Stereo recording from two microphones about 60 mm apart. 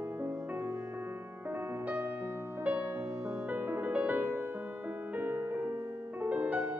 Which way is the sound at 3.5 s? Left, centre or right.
Right.